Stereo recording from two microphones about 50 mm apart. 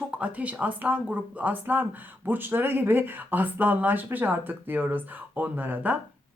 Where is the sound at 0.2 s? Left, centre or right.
Right.